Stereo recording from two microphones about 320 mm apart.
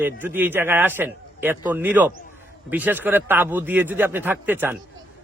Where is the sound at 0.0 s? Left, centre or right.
Centre.